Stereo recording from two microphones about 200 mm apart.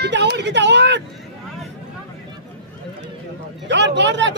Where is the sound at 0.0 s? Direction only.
60° right (ahead or behind).